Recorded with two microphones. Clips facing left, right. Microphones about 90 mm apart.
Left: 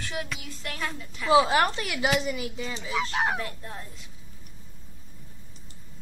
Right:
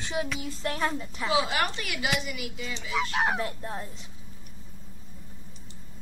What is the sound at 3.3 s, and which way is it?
Speech, 25° right (ahead or behind).